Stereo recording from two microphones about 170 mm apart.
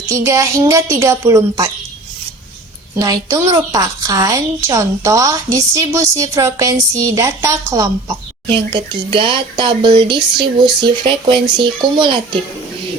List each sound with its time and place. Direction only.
0.1 s a woman's voice: 15° right (ahead or behind)
2.9 s a woman's voice: 20° right (ahead or behind)